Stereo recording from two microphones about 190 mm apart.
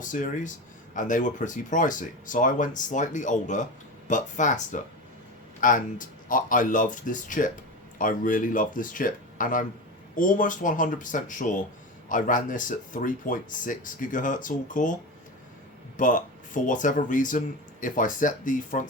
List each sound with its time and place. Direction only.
0.0 s speech: 40° left (ahead or behind)
16.0 s speech: 45° left (ahead or behind)